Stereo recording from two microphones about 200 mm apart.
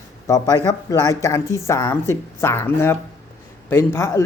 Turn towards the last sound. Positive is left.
turn(degrees=15)  # may be behind; listen again after turning